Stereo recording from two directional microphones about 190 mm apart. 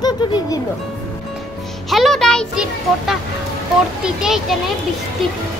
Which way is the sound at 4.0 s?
Centre (ahead or behind).